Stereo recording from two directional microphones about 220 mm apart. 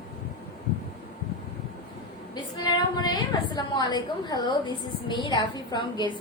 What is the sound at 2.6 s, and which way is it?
A woman's voice, 20° left (ahead or behind).